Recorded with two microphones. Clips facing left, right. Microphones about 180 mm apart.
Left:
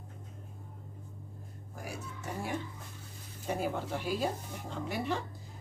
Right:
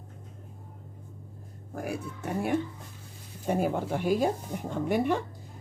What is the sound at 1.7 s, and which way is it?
Speech, 60° right (ahead or behind).